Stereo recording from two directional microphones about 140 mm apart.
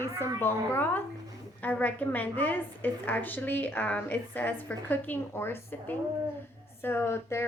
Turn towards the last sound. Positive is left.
turn(degrees=15)  # may be behind; listen again after turning